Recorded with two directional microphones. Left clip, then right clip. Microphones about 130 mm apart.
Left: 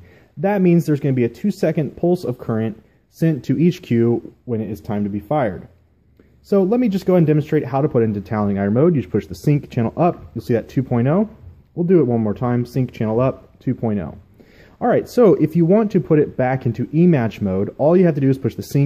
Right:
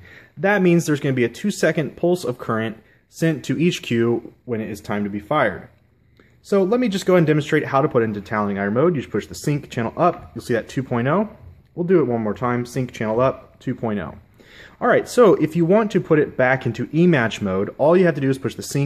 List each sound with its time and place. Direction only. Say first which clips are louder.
0.4 s speech: even; 30° left (ahead or behind)
6.5 s speech: left 1 dB; 40° left (ahead or behind)
8.1 s speech: left 1 dB; 45° left (ahead or behind)
13.7 s speech: left 2 dB; 35° left (ahead or behind)
17.7 s speech: even; 40° left (ahead or behind)